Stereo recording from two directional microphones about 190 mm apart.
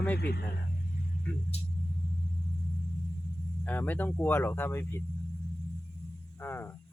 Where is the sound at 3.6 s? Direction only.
10° left (ahead or behind).